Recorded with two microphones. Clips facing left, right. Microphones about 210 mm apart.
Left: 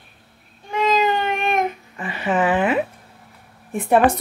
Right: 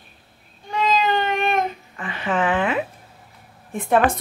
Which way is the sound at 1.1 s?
15° left (ahead or behind).